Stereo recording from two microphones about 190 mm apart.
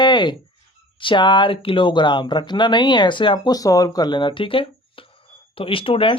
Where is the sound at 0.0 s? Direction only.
25° left (ahead or behind).